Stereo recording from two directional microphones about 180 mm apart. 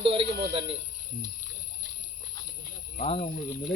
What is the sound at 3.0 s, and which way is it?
Speech, 35° left (ahead or behind).